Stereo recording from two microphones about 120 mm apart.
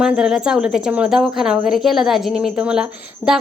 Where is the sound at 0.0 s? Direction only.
5° right (ahead or behind).